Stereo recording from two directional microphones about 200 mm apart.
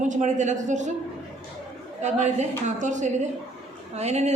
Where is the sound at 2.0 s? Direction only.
35° right (ahead or behind).